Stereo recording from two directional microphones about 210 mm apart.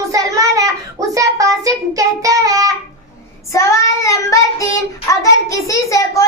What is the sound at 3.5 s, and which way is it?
Child singing, 15° left (ahead or behind).